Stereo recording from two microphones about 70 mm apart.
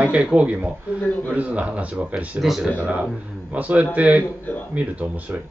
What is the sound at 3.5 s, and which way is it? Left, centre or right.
Speech, centre.